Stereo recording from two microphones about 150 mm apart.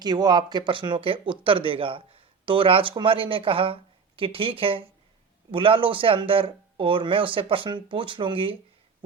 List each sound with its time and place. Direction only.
0.0 s speech: 25° right (ahead or behind)